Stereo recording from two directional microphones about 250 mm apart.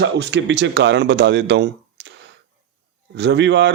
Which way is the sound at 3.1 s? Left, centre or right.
Right.